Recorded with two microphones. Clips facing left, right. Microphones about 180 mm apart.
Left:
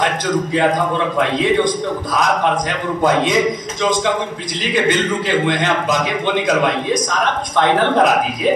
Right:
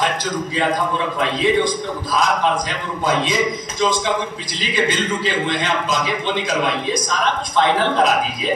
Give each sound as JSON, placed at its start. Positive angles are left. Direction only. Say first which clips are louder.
{"t": 4.7, "sound": "a man's voice", "louder": "left 3 dB", "side_deg": 60}